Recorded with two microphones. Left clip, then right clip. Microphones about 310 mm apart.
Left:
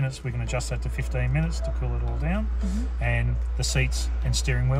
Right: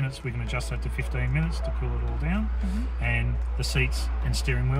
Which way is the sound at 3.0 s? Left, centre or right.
Left.